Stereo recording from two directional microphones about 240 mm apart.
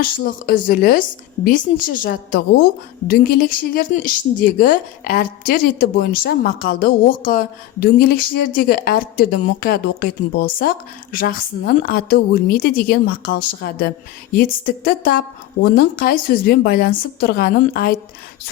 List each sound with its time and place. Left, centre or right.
0.0 s a woman's voice: left